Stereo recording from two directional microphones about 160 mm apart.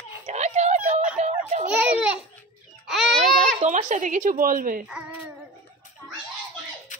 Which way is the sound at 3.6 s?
45° right (ahead or behind).